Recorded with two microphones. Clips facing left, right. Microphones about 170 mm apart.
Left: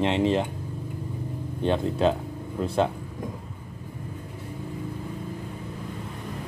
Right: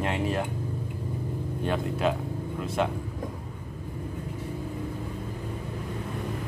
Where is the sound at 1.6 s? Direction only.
30° left (ahead or behind).